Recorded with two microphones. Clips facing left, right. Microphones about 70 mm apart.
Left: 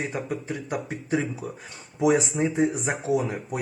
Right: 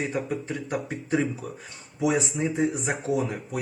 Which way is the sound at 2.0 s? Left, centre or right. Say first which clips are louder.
Left 3 dB; left.